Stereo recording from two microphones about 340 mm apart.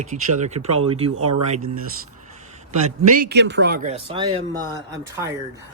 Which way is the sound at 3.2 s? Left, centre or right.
Right.